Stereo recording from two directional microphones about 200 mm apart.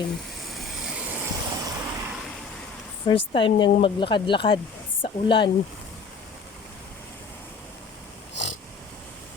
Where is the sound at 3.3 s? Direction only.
25° left (ahead or behind).